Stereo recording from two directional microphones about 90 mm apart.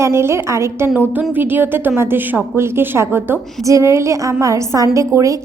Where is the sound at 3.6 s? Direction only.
35° right (ahead or behind).